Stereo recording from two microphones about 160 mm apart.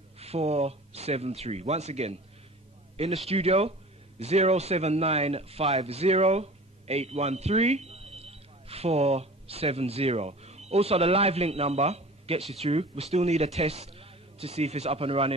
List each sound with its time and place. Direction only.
0.2 s speech: 40° right (ahead or behind)
3.3 s a man's voice: 40° right (ahead or behind)